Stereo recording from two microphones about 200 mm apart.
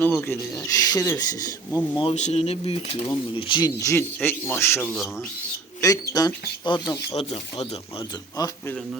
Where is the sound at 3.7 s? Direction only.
15° left (ahead or behind).